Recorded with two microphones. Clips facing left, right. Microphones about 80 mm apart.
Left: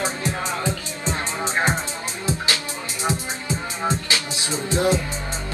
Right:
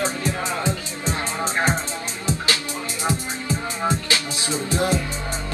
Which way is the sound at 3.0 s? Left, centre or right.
Left.